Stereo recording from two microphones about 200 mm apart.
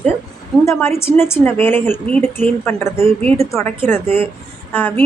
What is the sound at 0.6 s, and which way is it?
A woman's voice, 15° left (ahead or behind).